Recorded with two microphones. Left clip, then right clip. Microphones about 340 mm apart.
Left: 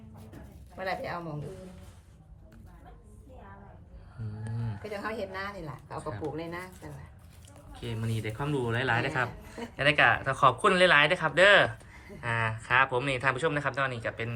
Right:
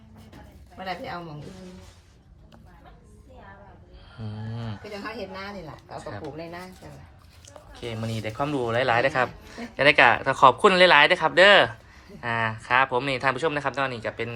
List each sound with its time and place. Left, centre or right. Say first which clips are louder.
6.0 s speech: right 1 dB; centre
7.7 s speech: right 5 dB; centre